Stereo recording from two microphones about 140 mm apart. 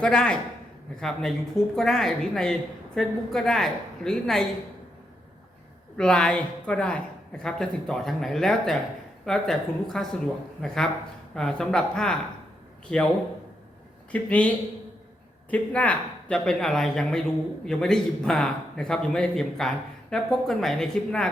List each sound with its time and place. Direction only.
0.0 s speech: 5° left (ahead or behind)
6.0 s speech: 5° left (ahead or behind)
14.1 s speech: 10° left (ahead or behind)